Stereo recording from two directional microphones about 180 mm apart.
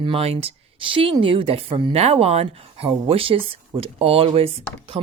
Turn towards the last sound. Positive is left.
turn(degrees=-35)  # may be behind; listen again after turning